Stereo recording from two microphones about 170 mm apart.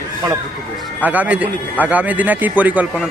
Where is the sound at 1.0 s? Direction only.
10° right (ahead or behind).